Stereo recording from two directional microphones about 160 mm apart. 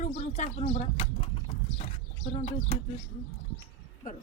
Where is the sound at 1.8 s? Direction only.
40° left (ahead or behind).